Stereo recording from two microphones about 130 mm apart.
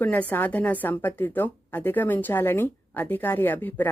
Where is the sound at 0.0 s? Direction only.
15° left (ahead or behind).